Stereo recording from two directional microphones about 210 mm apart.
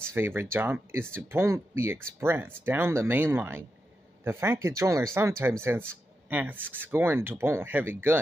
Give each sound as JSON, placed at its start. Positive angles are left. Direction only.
{"t": 0.1, "sound": "speech", "side_deg": -10}